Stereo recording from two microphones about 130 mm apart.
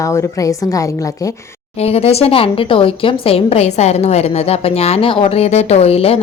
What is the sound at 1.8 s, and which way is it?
Speech, 50° left (ahead or behind).